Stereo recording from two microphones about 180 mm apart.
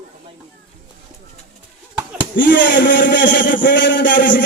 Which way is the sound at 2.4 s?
75° left (ahead or behind).